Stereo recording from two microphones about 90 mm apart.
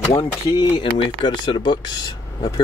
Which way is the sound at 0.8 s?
65° left (ahead or behind).